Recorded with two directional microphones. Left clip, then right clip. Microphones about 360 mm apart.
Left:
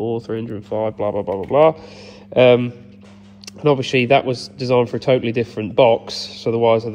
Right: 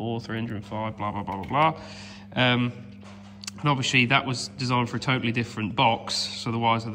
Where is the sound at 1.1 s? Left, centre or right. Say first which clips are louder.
Left 10 dB; right.